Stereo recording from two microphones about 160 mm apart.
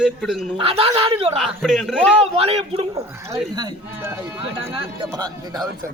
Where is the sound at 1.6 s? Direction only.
Centre (ahead or behind).